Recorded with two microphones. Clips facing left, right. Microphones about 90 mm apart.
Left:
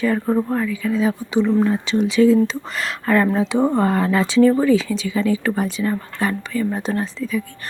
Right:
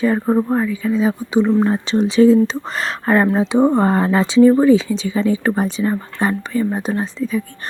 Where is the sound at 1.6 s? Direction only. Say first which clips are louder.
Right 2 dB; 35° right (ahead or behind).